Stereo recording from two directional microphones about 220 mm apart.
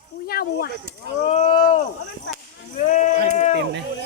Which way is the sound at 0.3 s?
45° left (ahead or behind).